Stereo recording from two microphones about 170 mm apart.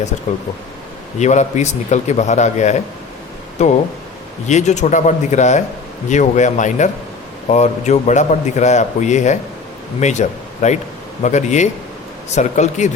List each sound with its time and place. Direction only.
1.2 s a man's voice: 45° left (ahead or behind)